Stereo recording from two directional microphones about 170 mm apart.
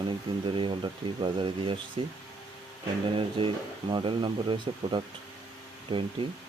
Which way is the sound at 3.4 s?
30° right (ahead or behind).